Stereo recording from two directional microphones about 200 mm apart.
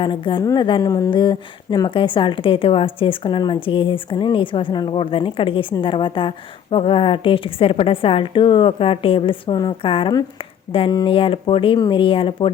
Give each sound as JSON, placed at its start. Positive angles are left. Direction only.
{"t": 0.0, "sound": "a woman's voice", "side_deg": 25}